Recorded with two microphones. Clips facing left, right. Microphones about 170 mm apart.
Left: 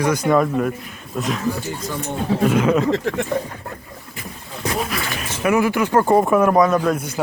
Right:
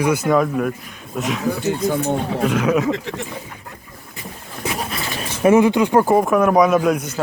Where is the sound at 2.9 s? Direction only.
50° left (ahead or behind).